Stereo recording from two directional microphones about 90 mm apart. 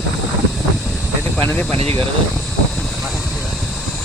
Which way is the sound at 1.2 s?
15° left (ahead or behind).